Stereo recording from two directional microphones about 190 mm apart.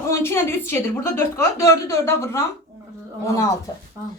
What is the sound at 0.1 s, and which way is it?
A woman's voice, 10° left (ahead or behind).